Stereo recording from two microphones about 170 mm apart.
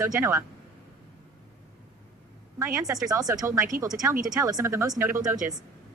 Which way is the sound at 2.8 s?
20° right (ahead or behind).